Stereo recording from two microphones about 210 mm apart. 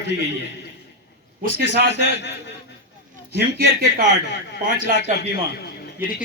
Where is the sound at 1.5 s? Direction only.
55° left (ahead or behind).